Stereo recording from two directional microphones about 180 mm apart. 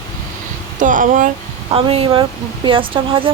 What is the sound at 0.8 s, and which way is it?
Speech, 45° right (ahead or behind).